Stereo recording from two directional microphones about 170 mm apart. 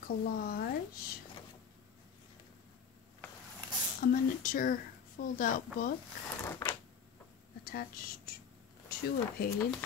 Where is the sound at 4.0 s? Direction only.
55° left (ahead or behind).